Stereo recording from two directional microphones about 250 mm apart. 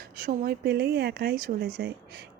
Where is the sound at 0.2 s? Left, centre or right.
Right.